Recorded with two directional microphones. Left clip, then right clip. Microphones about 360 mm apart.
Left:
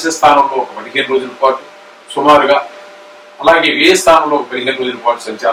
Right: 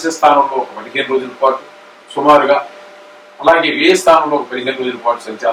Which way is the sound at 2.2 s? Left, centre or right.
Centre.